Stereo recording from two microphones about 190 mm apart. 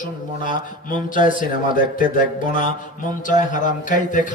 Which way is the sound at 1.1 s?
45° left (ahead or behind).